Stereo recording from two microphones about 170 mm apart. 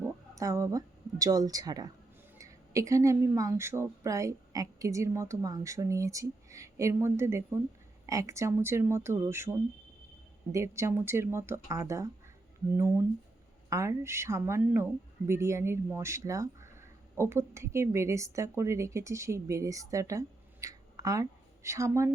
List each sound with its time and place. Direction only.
0.3 s a woman's voice: 20° right (ahead or behind)